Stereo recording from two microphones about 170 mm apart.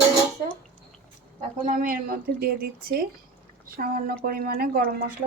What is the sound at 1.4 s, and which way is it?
Speech, 50° right (ahead or behind).